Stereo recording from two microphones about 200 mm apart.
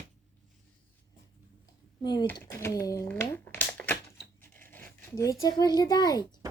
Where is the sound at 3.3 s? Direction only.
10° left (ahead or behind).